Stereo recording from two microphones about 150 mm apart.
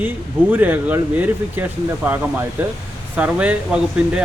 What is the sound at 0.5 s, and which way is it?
Speech, 10° right (ahead or behind).